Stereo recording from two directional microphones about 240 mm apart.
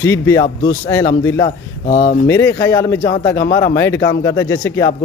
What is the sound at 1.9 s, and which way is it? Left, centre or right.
Speech, left.